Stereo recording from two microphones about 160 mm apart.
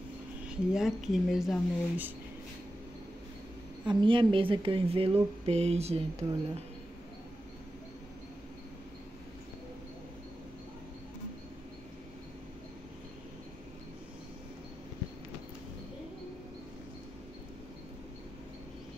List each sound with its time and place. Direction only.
0.4 s speech: 5° right (ahead or behind)
3.8 s speech: 30° right (ahead or behind)